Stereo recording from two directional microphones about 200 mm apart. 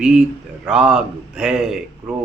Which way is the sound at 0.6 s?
5° right (ahead or behind).